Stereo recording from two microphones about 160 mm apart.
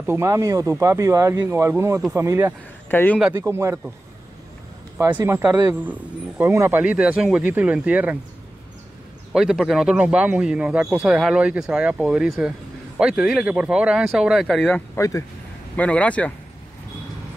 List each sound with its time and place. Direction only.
0.0 s a man's voice: 15° right (ahead or behind)
2.9 s speech: 10° left (ahead or behind)
3.3 s a man's voice: 15° right (ahead or behind)
4.9 s a man's voice: 15° right (ahead or behind)
9.3 s a man's voice: centre (ahead or behind)
15.0 s speech: 20° left (ahead or behind)
15.7 s speech: 10° left (ahead or behind)